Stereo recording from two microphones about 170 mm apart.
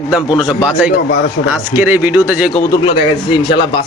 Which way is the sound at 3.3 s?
30° left (ahead or behind).